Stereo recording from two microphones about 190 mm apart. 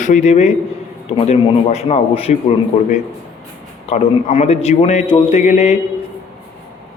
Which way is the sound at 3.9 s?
35° left (ahead or behind).